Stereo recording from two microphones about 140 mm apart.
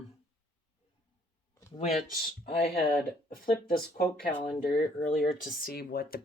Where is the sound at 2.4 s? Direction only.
90° left.